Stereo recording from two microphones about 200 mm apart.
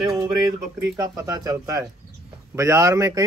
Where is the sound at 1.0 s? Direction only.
20° right (ahead or behind).